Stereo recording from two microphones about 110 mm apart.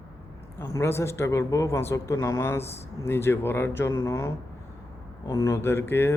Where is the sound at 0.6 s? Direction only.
25° left (ahead or behind).